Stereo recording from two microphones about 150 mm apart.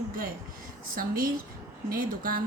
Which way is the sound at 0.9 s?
70° right (ahead or behind).